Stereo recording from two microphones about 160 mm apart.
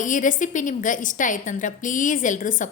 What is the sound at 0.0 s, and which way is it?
A woman's voice, 55° left (ahead or behind).